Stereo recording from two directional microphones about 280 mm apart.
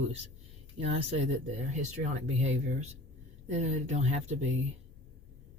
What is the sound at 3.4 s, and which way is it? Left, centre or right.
Speech, right.